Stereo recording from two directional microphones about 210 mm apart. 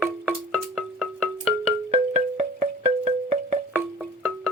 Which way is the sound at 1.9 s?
30° right (ahead or behind).